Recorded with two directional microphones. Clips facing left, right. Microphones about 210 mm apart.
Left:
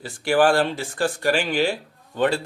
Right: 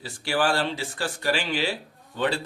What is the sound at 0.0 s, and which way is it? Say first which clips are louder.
Speech: left 7 dB; 50° left (ahead or behind).